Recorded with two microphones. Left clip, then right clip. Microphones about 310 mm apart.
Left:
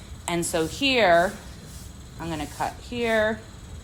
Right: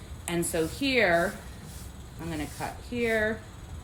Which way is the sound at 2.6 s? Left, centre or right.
Centre.